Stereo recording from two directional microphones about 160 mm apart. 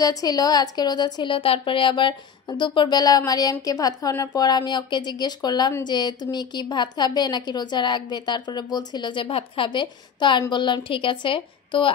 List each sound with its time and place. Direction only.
0.0 s a woman's voice: 25° left (ahead or behind)